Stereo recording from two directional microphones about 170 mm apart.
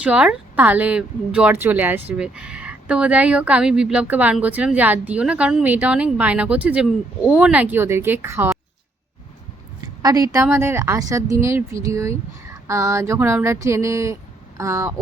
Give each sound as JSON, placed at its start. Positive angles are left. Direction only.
{"t": 0.0, "sound": "speech", "side_deg": -5}
{"t": 9.8, "sound": "a sound", "side_deg": -20}
{"t": 10.3, "sound": "speech", "side_deg": -15}